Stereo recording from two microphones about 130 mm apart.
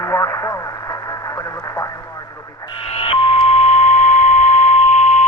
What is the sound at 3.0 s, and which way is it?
Beep, 50° left (ahead or behind).